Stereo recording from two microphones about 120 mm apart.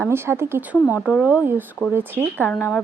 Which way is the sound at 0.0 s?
20° right (ahead or behind).